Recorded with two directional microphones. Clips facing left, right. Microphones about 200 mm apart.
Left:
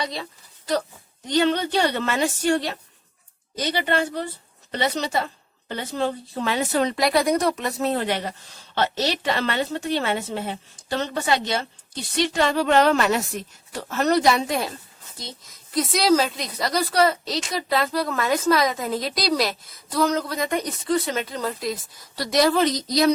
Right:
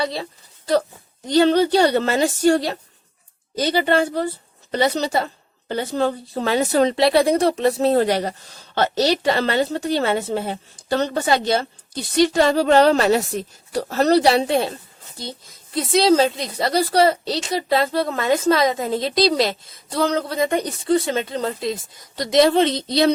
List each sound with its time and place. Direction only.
0.0 s a woman's voice: 30° right (ahead or behind)
1.3 s a woman's voice: 35° right (ahead or behind)